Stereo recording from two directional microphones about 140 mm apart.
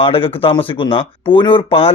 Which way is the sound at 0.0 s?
40° left (ahead or behind).